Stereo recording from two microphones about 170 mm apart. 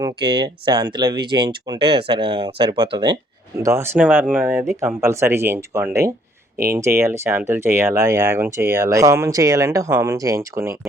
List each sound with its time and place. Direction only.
0.0 s speech: 30° right (ahead or behind)
3.6 s speech: 15° right (ahead or behind)